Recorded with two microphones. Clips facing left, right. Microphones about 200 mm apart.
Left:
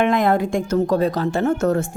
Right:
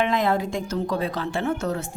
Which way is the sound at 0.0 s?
50° left (ahead or behind).